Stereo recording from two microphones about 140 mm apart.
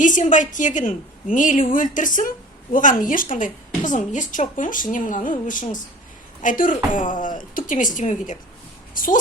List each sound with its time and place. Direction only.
0.0 s a woman's voice: 65° left (ahead or behind)
9.0 s a woman's voice: 75° left (ahead or behind)